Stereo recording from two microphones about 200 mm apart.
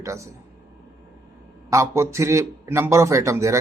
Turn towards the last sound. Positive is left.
turn(degrees=-15)  # may be behind; listen again after turning